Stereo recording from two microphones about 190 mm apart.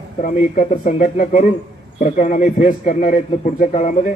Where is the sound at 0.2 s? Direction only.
40° left (ahead or behind).